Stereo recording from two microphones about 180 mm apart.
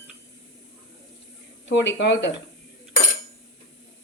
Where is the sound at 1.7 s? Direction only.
80° left.